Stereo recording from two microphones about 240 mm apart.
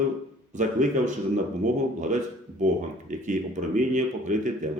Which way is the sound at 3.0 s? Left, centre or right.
Right.